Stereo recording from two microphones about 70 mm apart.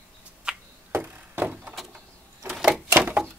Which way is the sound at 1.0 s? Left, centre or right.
Right.